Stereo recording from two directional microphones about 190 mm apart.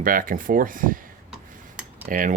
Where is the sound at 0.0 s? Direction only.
45° right (ahead or behind).